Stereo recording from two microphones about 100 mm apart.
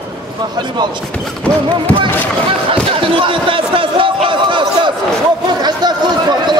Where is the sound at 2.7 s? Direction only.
60° right (ahead or behind); by 6.6 s 45° right (ahead or behind).